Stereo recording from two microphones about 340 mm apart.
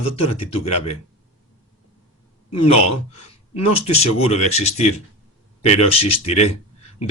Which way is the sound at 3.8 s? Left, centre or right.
Centre.